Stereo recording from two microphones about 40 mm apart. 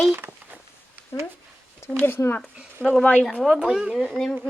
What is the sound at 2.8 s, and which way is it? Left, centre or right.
Speech, right.